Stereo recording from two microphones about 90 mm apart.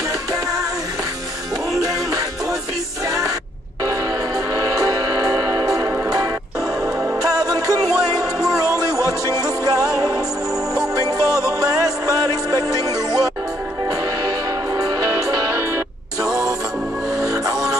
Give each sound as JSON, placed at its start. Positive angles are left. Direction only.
{"t": 4.7, "sound": "music", "side_deg": -45}
{"t": 14.7, "sound": "music", "side_deg": -40}